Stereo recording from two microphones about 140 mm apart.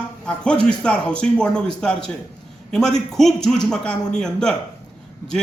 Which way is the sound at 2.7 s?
5° left (ahead or behind).